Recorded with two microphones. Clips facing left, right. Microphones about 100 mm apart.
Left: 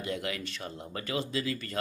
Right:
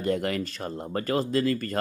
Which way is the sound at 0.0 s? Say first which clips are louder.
Right 8 dB; 45° right (ahead or behind).